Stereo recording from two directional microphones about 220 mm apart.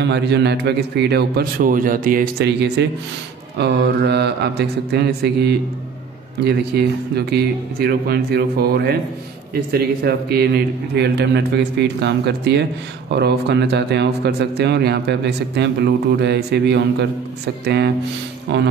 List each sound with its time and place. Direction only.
0.0 s speech: 50° right (ahead or behind)